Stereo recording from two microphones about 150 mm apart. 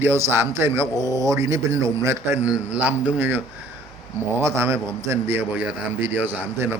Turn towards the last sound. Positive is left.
turn(degrees=-15)  # may be behind; listen again after turning